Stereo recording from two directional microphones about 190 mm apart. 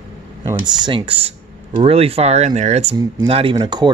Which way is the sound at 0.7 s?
25° right (ahead or behind).